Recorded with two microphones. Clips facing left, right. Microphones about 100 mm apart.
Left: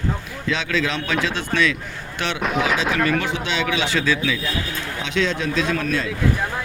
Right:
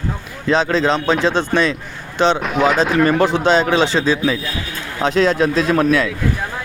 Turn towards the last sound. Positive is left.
turn(degrees=-70)  # may be behind; listen again after turning